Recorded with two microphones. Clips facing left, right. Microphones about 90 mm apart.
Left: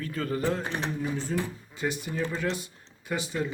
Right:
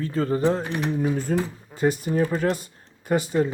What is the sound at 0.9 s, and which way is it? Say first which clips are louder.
Speech: right 6 dB; 40° right (ahead or behind).